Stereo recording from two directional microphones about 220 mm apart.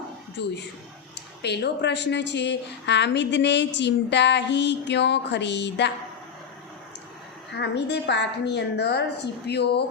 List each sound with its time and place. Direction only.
0.4 s speech: 50° left (ahead or behind)
7.5 s speech: 50° left (ahead or behind)